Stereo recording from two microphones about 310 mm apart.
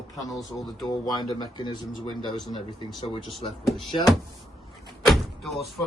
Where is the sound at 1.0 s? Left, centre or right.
Centre.